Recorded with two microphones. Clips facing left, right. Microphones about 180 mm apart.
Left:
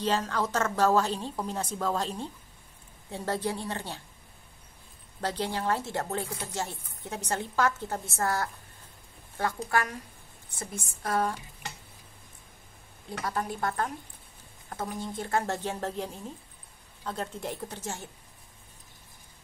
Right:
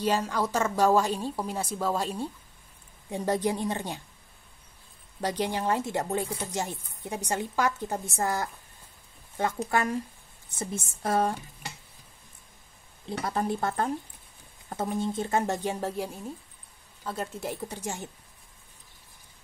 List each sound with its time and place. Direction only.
0.0 s speech: 10° right (ahead or behind)
5.2 s speech: 15° right (ahead or behind)
13.1 s speech: 25° right (ahead or behind)